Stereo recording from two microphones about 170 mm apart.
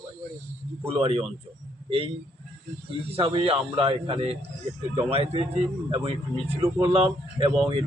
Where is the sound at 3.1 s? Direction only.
35° right (ahead or behind).